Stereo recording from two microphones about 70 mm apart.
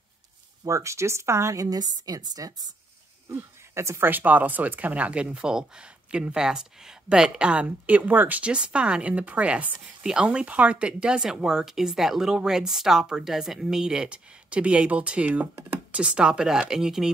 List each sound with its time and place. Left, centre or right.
0.7 s a woman's voice: right
3.7 s a woman's voice: right
4.1 s speech: right; by 17.1 s centre